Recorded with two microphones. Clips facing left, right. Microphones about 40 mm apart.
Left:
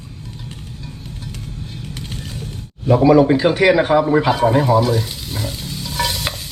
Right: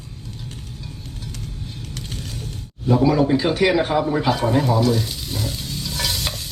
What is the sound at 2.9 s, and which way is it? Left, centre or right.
A man's voice, left.